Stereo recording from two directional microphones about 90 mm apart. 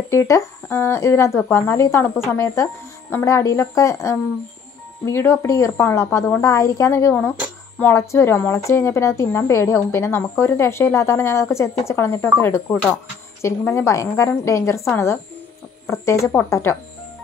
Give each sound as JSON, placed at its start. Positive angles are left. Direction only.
{"t": 0.1, "sound": "speech", "side_deg": 35}
{"t": 15.9, "sound": "speech", "side_deg": 35}